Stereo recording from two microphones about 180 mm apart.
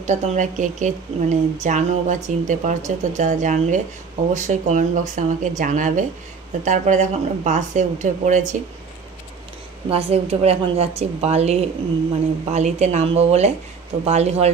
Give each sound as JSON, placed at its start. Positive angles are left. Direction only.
{"t": 0.0, "sound": "speech", "side_deg": -40}
{"t": 9.8, "sound": "a woman's voice", "side_deg": -35}